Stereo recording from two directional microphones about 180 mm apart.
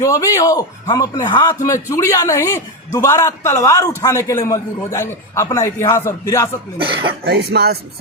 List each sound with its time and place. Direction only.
0.0 s a man's voice: 15° left (ahead or behind)
6.7 s speech: 30° right (ahead or behind)
7.3 s speech: 65° right (ahead or behind)